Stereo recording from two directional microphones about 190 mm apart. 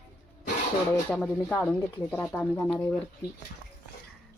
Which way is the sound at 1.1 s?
5° left (ahead or behind).